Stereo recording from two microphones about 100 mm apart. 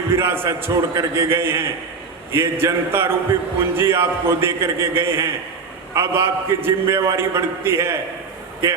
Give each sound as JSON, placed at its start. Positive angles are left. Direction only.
{"t": 0.1, "sound": "a man's voice", "side_deg": -25}